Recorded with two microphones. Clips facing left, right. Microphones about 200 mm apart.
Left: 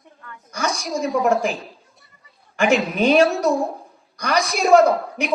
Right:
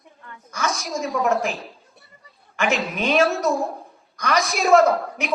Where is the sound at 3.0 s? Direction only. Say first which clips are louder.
Left 5 dB; 35° left (ahead or behind).